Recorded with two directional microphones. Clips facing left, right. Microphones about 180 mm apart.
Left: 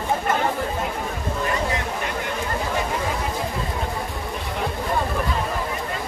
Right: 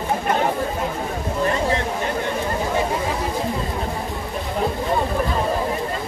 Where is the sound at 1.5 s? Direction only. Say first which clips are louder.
Right 4 dB; 30° right (ahead or behind).